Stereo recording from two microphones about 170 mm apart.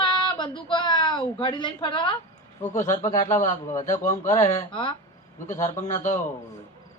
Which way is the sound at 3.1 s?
45° left (ahead or behind).